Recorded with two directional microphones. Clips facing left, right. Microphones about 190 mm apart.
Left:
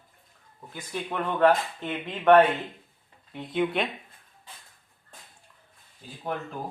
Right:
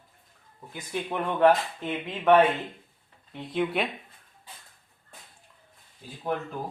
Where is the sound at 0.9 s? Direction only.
15° right (ahead or behind).